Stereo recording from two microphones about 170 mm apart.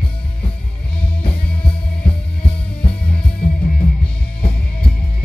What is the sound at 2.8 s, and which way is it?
Music, 35° left (ahead or behind).